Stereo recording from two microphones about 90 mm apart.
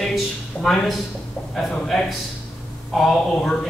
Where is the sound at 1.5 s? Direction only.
5° left (ahead or behind).